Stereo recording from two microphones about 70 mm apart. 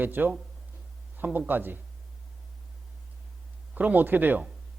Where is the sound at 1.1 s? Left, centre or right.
Right.